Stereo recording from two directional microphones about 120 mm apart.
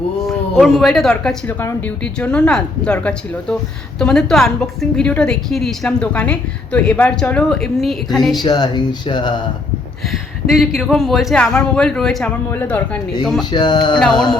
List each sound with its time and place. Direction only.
0.3 s a woman's voice: centre (ahead or behind)
8.4 s speech: 35° left (ahead or behind)
10.1 s speech: centre (ahead or behind)
12.5 s a woman's voice: 15° left (ahead or behind)
13.5 s speech: 35° left (ahead or behind)
14.0 s speech: 5° left (ahead or behind)